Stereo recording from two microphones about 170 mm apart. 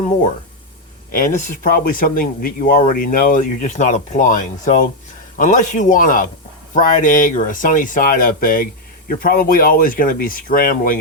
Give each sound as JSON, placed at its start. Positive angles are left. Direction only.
{"t": 1.1, "sound": "speech", "side_deg": 50}